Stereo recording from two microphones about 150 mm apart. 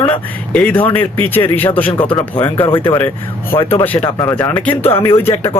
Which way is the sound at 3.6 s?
35° left (ahead or behind).